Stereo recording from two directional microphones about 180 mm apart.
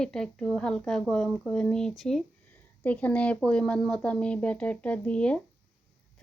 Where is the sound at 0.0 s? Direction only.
5° left (ahead or behind).